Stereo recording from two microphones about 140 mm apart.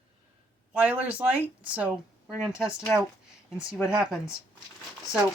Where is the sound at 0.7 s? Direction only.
10° right (ahead or behind).